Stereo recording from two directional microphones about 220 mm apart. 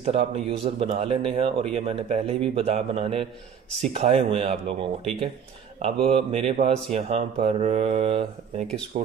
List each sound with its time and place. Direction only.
0.0 s speech: 25° right (ahead or behind)